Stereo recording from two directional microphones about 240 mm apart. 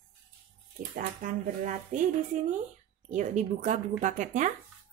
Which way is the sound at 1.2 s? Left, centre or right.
Right.